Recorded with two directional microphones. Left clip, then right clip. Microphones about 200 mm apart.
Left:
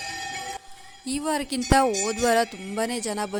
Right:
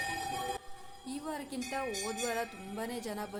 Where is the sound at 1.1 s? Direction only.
45° left (ahead or behind).